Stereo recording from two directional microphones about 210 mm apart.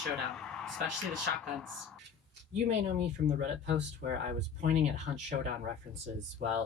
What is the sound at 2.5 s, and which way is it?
Speech, 35° right (ahead or behind).